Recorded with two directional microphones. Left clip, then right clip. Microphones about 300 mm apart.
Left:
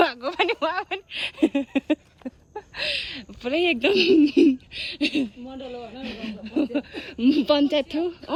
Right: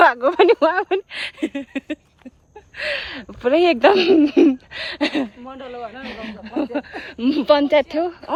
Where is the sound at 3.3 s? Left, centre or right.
Right.